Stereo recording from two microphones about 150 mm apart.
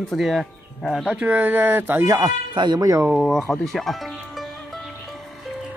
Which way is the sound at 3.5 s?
Centre (ahead or behind).